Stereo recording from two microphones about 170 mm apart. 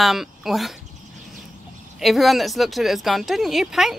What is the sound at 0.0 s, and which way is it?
Speech, centre (ahead or behind).